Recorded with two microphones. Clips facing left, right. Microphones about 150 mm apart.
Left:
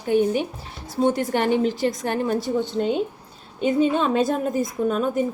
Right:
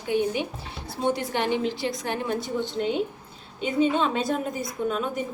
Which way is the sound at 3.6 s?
45° left (ahead or behind).